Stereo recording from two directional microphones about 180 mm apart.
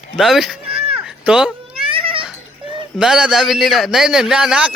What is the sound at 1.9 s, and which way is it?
Children playing, 30° right (ahead or behind).